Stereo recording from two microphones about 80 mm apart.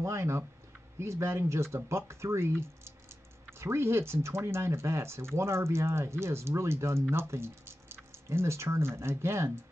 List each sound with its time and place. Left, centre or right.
0.0 s speech: right